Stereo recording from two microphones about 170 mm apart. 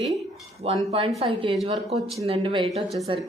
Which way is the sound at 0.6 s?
35° right (ahead or behind).